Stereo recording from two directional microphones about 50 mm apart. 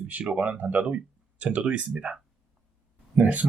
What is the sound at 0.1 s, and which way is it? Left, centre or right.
Speech, right.